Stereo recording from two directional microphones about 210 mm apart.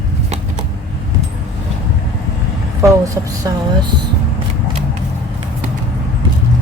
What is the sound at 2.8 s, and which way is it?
A woman's voice, 15° right (ahead or behind).